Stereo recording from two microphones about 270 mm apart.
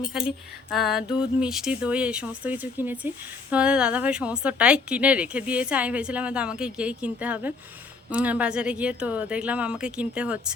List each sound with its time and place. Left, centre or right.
0.1 s a woman's voice: centre